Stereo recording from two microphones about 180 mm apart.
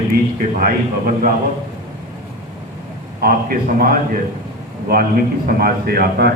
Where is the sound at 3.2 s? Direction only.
55° right (ahead or behind).